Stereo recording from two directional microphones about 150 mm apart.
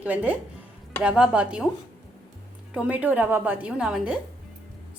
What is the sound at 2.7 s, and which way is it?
A woman's voice, 10° right (ahead or behind).